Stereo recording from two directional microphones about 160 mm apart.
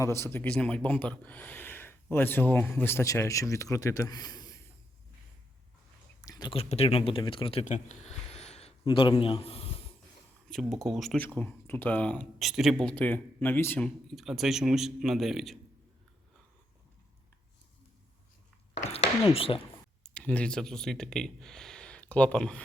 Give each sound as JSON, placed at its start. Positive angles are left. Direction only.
{"t": 0.0, "sound": "speech", "side_deg": 15}
{"t": 6.2, "sound": "speech", "side_deg": 25}
{"t": 7.6, "sound": "a sound", "side_deg": 50}
{"t": 8.8, "sound": "a man's voice", "side_deg": 30}
{"t": 10.5, "sound": "speech", "side_deg": 0}
{"t": 12.4, "sound": "speech", "side_deg": 0}
{"t": 18.8, "sound": "a sound", "side_deg": 40}
{"t": 20.0, "sound": "speech", "side_deg": 10}